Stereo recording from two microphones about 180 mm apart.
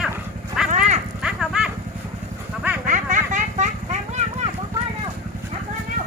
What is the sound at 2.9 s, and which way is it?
Vehicle, 45° right (ahead or behind).